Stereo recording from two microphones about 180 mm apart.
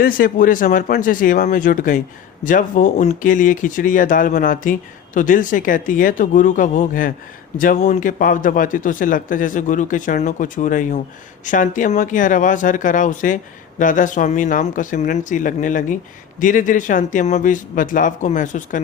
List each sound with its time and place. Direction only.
0.0 s speech: 50° left (ahead or behind)